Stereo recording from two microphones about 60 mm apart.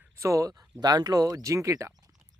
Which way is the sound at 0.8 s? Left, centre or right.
Right.